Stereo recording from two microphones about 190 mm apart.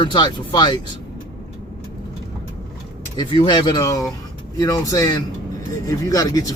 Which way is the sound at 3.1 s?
25° left (ahead or behind).